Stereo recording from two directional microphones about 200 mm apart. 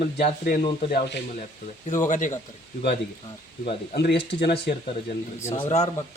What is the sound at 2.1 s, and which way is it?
Speech, 40° left (ahead or behind).